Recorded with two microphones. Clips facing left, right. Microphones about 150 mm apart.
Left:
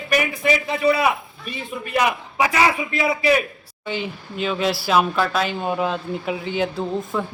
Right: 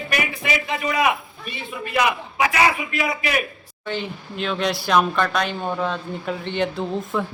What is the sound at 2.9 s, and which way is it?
Speech, 25° left (ahead or behind).